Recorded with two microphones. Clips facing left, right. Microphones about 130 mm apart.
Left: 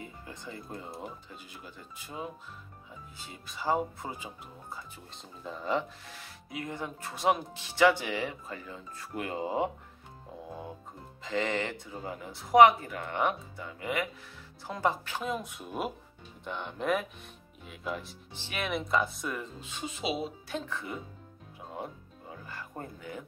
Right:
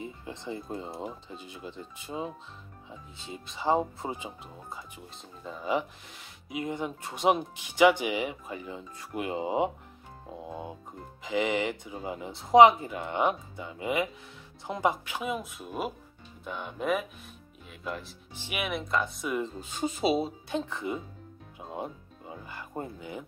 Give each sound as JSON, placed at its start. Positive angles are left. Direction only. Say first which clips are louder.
{"t": 0.0, "sound": "speech", "louder": "right 5 dB", "side_deg": -25}
{"t": 5.4, "sound": "speech", "louder": "even", "side_deg": 0}
{"t": 5.7, "sound": "speech", "louder": "right 2 dB", "side_deg": -15}
{"t": 18.3, "sound": "speech", "louder": "right 2 dB", "side_deg": -10}
{"t": 18.7, "sound": "speech", "louder": "left 2 dB", "side_deg": 0}
{"t": 19.6, "sound": "speech", "louder": "right 7 dB", "side_deg": -40}
{"t": 20.4, "sound": "speech", "louder": "right 5 dB", "side_deg": -20}